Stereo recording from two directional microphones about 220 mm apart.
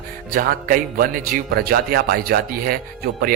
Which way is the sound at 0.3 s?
40° right (ahead or behind).